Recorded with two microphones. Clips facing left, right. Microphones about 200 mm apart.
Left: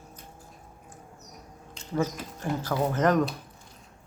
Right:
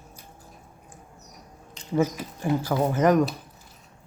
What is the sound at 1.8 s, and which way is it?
Speech, 10° right (ahead or behind).